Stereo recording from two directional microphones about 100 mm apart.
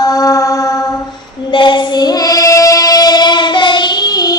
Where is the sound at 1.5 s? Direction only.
50° left (ahead or behind).